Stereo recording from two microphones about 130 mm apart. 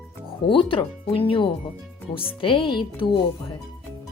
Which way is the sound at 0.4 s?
40° left (ahead or behind).